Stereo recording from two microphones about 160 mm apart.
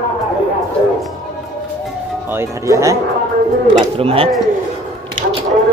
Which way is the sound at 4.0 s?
35° right (ahead or behind).